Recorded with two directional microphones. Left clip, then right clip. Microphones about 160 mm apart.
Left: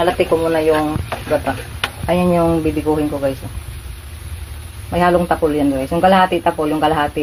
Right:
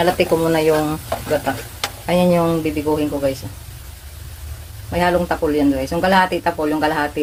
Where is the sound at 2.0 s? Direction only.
20° right (ahead or behind).